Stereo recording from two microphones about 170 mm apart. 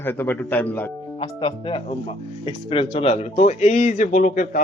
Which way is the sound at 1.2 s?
30° left (ahead or behind).